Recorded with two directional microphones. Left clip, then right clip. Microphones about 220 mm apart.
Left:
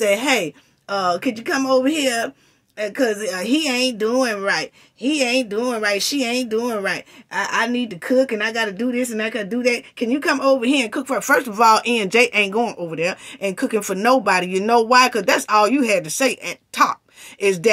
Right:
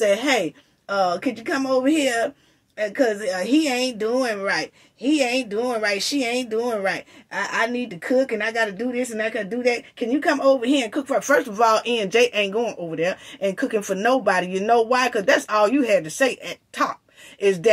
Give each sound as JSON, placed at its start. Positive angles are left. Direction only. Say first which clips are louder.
{"t": 0.0, "sound": "speech", "louder": "left 1 dB", "side_deg": 55}